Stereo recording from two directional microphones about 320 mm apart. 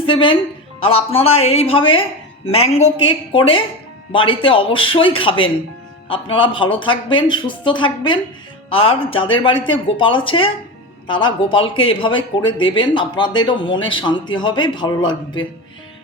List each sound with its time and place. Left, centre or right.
0.0 s a woman's voice: centre